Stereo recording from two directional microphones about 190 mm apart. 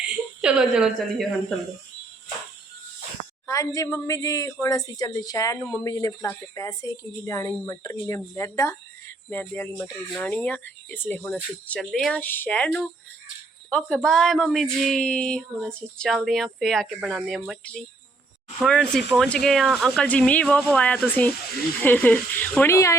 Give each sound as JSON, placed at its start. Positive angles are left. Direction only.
{"t": 0.0, "sound": "speech", "side_deg": -5}
{"t": 3.4, "sound": "a woman's voice", "side_deg": 15}